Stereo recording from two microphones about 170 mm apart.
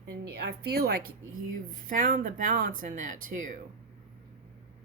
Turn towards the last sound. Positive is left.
turn(degrees=-50)  # may be behind; listen again after turning